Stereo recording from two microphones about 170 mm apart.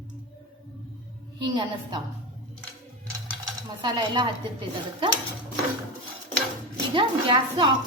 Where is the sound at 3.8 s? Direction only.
25° right (ahead or behind).